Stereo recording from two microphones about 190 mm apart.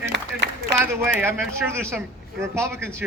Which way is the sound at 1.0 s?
10° right (ahead or behind).